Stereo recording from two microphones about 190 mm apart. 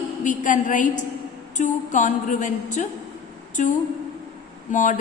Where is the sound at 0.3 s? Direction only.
45° left (ahead or behind).